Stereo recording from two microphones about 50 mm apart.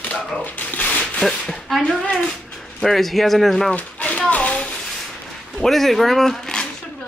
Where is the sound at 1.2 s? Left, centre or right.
Centre.